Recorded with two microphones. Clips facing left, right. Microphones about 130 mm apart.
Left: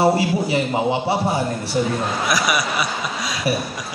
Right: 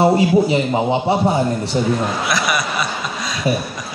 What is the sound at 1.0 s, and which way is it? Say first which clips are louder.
Speech: right 4 dB; 20° right (ahead or behind).